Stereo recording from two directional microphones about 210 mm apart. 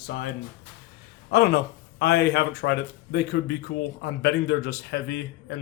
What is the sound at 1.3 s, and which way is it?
Speech, 50° left (ahead or behind).